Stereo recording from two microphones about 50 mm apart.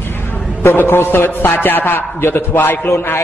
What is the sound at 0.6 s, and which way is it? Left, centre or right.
A man's voice, left.